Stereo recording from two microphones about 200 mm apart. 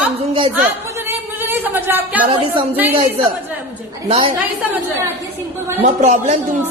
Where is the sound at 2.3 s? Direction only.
25° right (ahead or behind).